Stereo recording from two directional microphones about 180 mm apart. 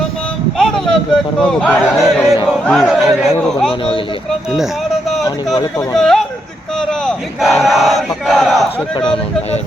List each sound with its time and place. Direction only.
0.6 s speech: 5° left (ahead or behind)
3.7 s speech: 30° left (ahead or behind)
4.3 s a sound: centre (ahead or behind)
6.0 s speech: centre (ahead or behind)
6.7 s battle cry: 5° left (ahead or behind)